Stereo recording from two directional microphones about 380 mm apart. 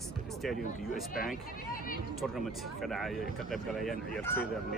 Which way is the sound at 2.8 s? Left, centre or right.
Centre.